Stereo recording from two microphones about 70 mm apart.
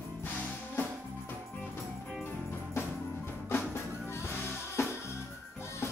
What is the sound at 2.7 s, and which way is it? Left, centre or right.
Music, left.